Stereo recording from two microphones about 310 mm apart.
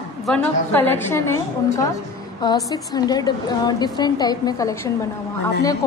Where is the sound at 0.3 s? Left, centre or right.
Centre.